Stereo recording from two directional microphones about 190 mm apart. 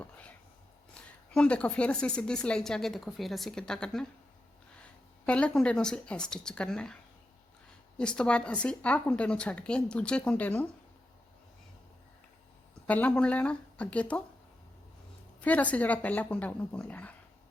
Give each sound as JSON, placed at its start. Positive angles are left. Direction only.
{"t": 0.0, "sound": "a sound", "side_deg": 5}
{"t": 1.3, "sound": "a woman's voice", "side_deg": 5}
{"t": 5.2, "sound": "a woman's voice", "side_deg": 5}
{"t": 12.9, "sound": "speech", "side_deg": 5}
{"t": 15.4, "sound": "speech", "side_deg": 5}